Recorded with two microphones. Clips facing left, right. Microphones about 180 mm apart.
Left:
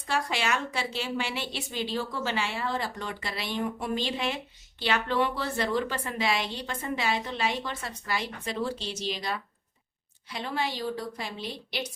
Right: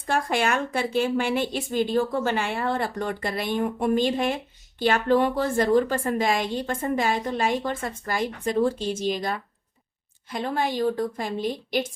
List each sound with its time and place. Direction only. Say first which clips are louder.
0.0 s a woman's voice: right 6 dB; 50° right (ahead or behind)